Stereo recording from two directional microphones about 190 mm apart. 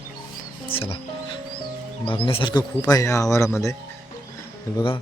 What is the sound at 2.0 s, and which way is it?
A man's voice, 25° left (ahead or behind).